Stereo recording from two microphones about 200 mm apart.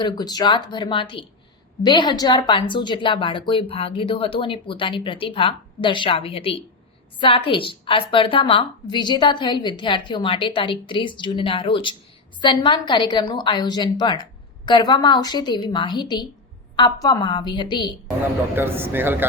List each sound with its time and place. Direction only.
0.0 s a woman's voice: 20° left (ahead or behind)
18.5 s a man's voice: 10° right (ahead or behind)